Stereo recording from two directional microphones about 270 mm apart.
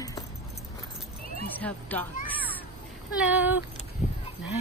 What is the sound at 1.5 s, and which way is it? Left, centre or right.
Speech, centre.